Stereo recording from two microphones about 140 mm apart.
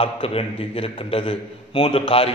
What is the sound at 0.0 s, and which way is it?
A man's voice, 40° left (ahead or behind).